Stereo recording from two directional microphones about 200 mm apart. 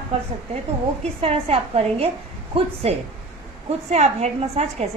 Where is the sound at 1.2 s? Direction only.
30° right (ahead or behind).